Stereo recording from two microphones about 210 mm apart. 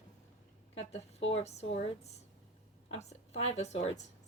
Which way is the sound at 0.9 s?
30° left (ahead or behind).